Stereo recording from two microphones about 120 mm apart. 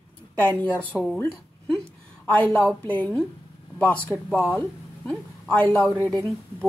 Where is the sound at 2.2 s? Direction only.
10° left (ahead or behind).